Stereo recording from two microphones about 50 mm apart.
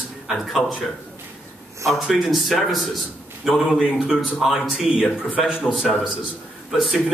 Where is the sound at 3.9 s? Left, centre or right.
Centre.